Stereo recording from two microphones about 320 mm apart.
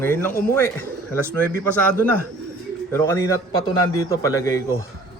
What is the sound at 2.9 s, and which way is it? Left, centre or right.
Speech, centre.